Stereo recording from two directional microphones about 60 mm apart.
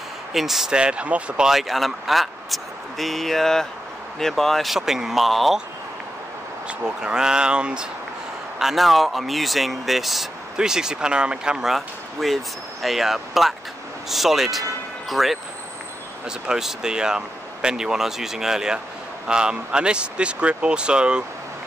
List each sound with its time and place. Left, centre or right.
0.3 s speech: centre
0.7 s speech: centre
1.5 s speech: centre
7.0 s speech: centre
8.5 s speech: centre
11.7 s speech: centre